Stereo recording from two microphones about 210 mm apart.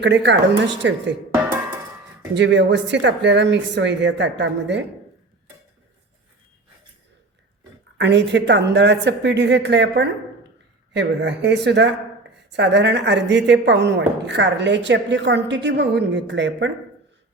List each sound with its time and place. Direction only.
0.0 s speech: 55° right (ahead or behind)
2.3 s speech: 55° right (ahead or behind)
7.9 s speech: 55° right (ahead or behind)